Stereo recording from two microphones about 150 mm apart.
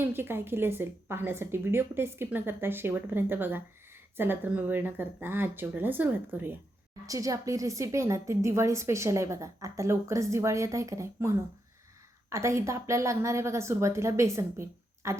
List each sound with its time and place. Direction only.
0.0 s a woman's voice: 15° right (ahead or behind)